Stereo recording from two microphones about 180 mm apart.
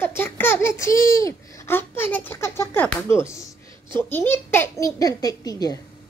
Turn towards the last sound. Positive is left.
turn(degrees=20)  # may be behind; listen again after turning